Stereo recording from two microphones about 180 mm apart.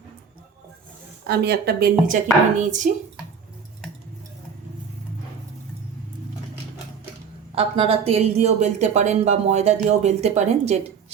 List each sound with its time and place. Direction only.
1.3 s speech: 60° right (ahead or behind)
2.6 s a child's voice: 45° right (ahead or behind)
7.5 s a woman's voice: 30° right (ahead or behind)